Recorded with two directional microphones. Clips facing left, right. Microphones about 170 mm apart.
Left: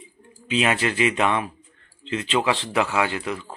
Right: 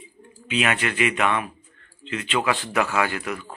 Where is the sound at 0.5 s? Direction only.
30° left (ahead or behind).